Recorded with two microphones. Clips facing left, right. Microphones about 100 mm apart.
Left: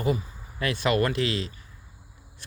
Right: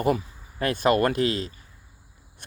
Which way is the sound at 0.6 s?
45° right (ahead or behind).